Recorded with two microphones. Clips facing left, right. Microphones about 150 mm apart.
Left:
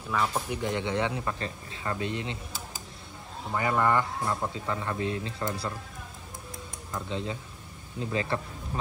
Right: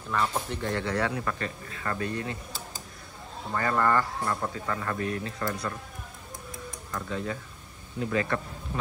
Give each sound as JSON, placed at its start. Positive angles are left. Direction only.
{"t": 0.1, "sound": "speech", "side_deg": 5}
{"t": 3.5, "sound": "speech", "side_deg": 15}
{"t": 6.9, "sound": "speech", "side_deg": 25}